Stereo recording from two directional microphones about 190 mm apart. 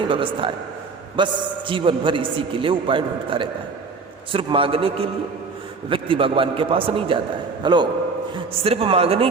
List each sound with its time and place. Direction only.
0.1 s a man's voice: 25° right (ahead or behind)